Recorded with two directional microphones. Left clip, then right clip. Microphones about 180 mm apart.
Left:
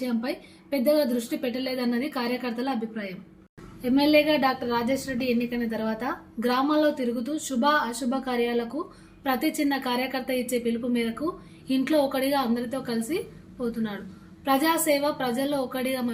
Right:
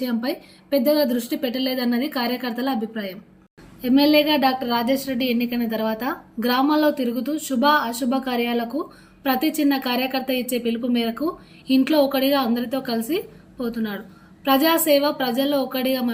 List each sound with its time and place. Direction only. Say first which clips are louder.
0.0 s a woman's voice: right 4 dB; 30° right (ahead or behind)
14.4 s a woman's voice: right 5 dB; 30° right (ahead or behind)